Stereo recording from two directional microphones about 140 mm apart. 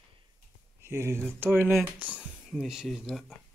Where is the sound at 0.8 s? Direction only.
20° right (ahead or behind); by 3.3 s centre (ahead or behind).